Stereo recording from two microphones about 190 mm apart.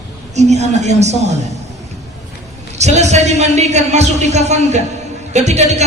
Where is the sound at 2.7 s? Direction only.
35° right (ahead or behind).